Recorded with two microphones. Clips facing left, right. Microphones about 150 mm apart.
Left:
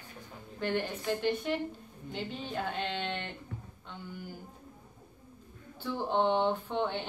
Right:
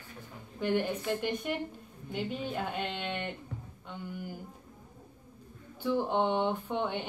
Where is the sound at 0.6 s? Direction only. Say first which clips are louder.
Right 3 dB; 10° right (ahead or behind).